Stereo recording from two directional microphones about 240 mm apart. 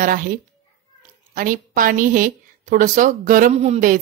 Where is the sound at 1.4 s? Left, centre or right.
Right.